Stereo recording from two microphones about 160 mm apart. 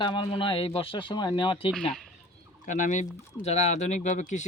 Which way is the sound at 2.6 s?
50° left (ahead or behind).